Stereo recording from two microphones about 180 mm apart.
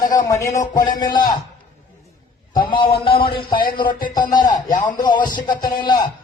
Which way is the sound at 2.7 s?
30° left (ahead or behind).